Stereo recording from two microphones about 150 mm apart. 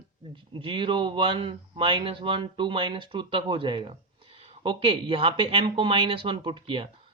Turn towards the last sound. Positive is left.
turn(degrees=-35)  # may be behind; listen again after turning